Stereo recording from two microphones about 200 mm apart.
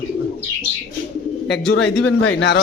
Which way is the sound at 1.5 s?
60° left (ahead or behind).